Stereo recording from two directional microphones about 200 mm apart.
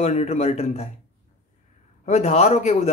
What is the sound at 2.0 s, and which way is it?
Speech, 35° left (ahead or behind).